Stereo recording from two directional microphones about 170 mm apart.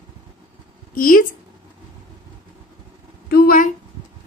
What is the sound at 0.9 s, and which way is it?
Speech, 55° left (ahead or behind).